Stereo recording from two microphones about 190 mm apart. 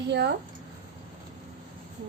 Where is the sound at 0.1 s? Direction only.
65° right (ahead or behind).